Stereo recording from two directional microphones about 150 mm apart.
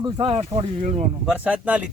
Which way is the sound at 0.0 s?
35° right (ahead or behind).